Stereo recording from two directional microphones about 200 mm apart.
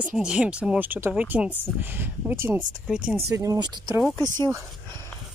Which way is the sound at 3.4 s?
20° right (ahead or behind).